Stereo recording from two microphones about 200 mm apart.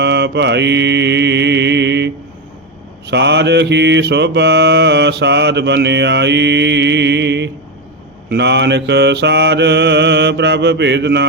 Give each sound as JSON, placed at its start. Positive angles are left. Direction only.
{"t": 0.0, "sound": "mantra", "side_deg": -60}
{"t": 3.1, "sound": "mantra", "side_deg": -60}